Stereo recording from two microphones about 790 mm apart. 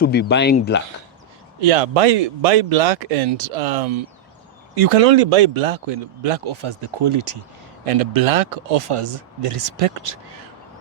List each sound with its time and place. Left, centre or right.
0.0 s speech: centre
1.6 s speech: right